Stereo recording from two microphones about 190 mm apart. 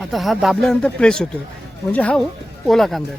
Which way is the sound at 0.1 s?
Centre (ahead or behind).